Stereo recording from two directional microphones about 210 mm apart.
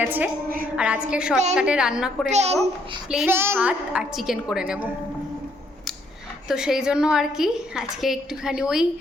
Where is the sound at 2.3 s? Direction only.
30° right (ahead or behind).